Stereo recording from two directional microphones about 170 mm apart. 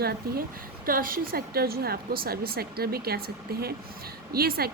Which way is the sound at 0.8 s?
55° right (ahead or behind).